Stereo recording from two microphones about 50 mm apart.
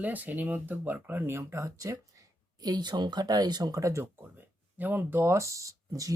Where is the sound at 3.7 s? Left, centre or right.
Right.